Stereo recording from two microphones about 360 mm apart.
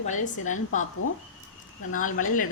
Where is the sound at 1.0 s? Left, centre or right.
Left.